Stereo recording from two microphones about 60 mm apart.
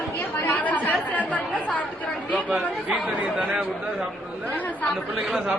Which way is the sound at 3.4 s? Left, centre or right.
Centre.